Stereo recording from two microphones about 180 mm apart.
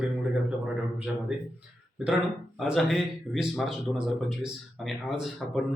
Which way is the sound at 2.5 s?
Centre (ahead or behind).